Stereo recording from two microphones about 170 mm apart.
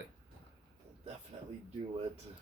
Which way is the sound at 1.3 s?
35° right (ahead or behind).